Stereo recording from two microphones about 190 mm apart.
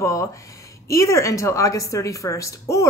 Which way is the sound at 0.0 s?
15° left (ahead or behind).